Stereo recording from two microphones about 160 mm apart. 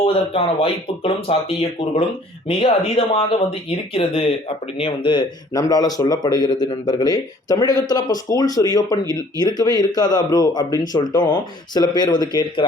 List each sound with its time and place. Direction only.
0.0 s speech: 35° left (ahead or behind)
2.5 s speech: 35° left (ahead or behind)